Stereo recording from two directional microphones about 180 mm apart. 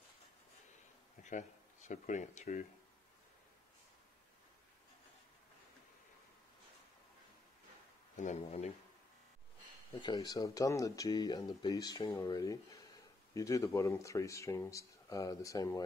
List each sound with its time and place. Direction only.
1.2 s speech: 45° left (ahead or behind)
8.2 s speech: 40° left (ahead or behind)
9.9 s speech: 25° left (ahead or behind)